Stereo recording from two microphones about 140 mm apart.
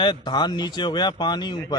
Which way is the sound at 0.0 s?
30° left (ahead or behind).